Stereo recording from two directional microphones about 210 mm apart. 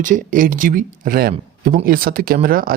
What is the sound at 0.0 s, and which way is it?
Speech, 40° right (ahead or behind).